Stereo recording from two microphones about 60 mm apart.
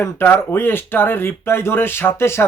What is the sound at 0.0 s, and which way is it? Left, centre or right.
Speech, left.